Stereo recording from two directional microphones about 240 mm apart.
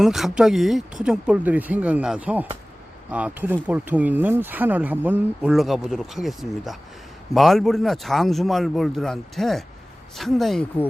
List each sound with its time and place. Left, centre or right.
0.0 s a man's voice: centre